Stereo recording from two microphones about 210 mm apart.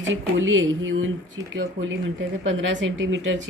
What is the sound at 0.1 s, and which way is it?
Speech, 65° right (ahead or behind).